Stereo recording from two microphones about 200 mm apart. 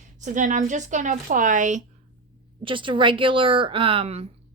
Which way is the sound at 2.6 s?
25° right (ahead or behind).